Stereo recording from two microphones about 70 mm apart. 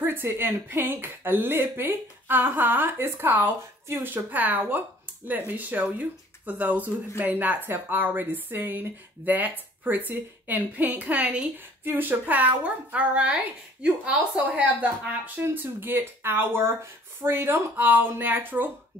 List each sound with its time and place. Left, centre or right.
0.0 s a woman's voice: right
15.4 s speech: right